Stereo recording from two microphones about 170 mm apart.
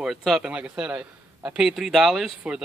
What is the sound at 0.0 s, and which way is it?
A man's voice, centre (ahead or behind).